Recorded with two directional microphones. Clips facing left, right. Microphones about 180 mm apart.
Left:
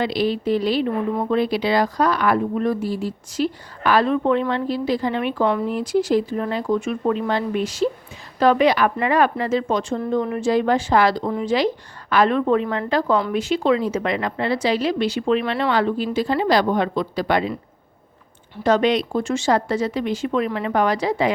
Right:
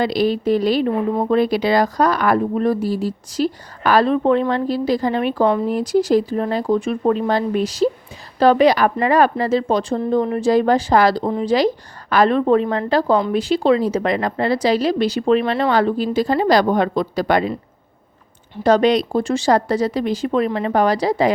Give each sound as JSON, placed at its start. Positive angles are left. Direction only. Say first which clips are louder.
{"t": 0.0, "sound": "speech", "louder": "right 3 dB", "side_deg": -40}
{"t": 18.6, "sound": "speech", "louder": "right 3 dB", "side_deg": -35}